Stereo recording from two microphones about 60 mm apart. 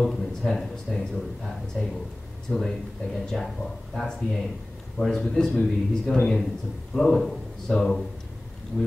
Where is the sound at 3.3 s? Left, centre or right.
Centre.